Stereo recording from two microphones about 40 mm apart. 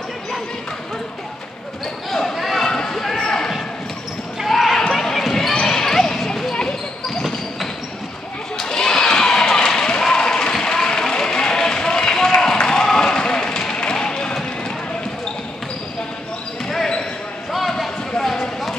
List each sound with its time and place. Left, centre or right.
2.1 s basketball bounce: centre
2.7 s basketball bounce: centre
4.5 s basketball bounce: centre
4.9 s basketball bounce: centre
5.5 s basketball bounce: centre
8.5 s a sound: centre
12.6 s basketball bounce: centre
16.6 s basketball bounce: centre
18.2 s a sound: centre